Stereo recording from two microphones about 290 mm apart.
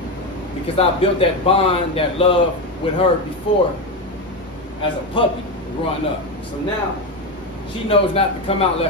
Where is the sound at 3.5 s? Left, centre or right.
Centre.